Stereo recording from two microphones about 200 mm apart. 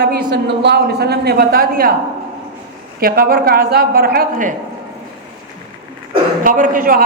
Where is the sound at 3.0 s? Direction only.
45° right (ahead or behind).